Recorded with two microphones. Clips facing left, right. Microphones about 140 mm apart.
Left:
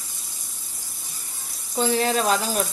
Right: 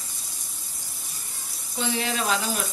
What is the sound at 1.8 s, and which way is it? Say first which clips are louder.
Speech: left 6 dB; 40° left (ahead or behind).